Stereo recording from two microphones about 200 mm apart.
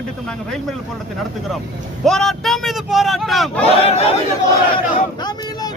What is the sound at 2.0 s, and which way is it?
Speech, centre (ahead or behind).